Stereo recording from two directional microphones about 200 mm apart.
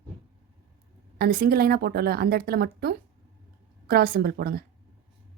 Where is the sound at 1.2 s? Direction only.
50° right (ahead or behind).